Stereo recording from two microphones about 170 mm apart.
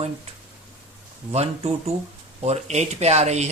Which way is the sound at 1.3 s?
35° right (ahead or behind).